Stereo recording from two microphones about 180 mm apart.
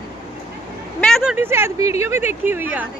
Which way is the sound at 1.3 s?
15° right (ahead or behind).